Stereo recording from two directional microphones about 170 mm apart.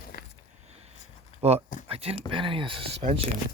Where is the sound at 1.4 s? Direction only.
40° right (ahead or behind).